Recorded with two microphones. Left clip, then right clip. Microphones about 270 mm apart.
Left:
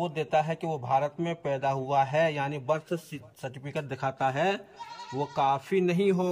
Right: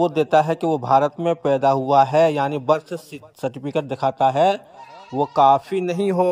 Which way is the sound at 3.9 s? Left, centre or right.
Right.